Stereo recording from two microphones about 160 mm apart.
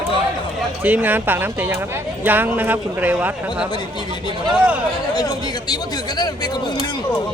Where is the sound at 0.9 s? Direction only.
10° right (ahead or behind).